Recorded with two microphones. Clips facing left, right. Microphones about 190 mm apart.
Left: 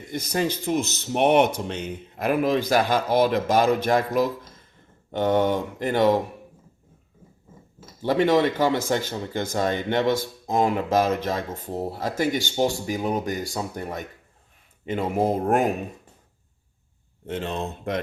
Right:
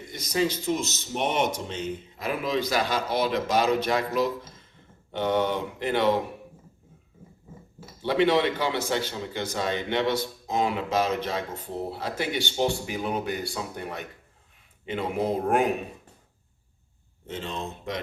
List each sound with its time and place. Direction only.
0.1 s speech: 55° left (ahead or behind)
8.0 s speech: 45° left (ahead or behind)
17.2 s speech: 60° left (ahead or behind)